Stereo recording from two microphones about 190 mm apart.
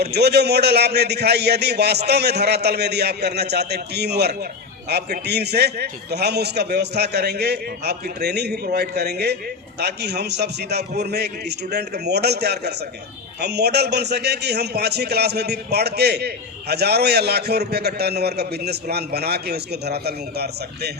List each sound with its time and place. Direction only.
0.0 s a man's voice: 60° right (ahead or behind)